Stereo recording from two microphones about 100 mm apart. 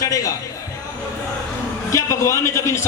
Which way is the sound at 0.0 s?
35° left (ahead or behind).